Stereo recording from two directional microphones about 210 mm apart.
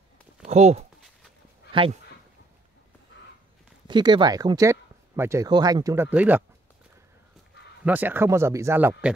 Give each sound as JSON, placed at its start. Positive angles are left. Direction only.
{"t": 0.5, "sound": "speech", "side_deg": -30}
{"t": 3.8, "sound": "speech", "side_deg": -20}
{"t": 7.8, "sound": "speech", "side_deg": -10}